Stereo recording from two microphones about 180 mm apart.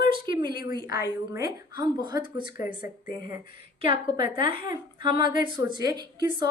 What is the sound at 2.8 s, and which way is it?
Speech, 50° left (ahead or behind).